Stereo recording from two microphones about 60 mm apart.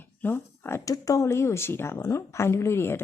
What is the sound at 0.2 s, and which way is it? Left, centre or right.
Speech, left.